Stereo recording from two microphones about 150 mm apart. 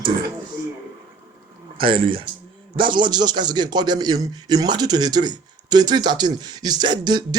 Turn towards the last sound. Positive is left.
turn(degrees=-30)  # may be behind; listen again after turning